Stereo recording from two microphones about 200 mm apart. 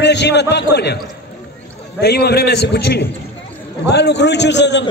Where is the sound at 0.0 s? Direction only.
60° left (ahead or behind).